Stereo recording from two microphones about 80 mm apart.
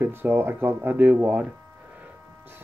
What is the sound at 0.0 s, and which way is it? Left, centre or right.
Speech, right.